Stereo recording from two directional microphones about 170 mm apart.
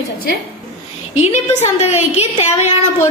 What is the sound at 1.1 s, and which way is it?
A woman's voice, 40° left (ahead or behind).